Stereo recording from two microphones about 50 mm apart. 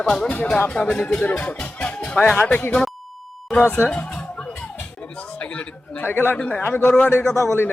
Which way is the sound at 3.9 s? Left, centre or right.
Left.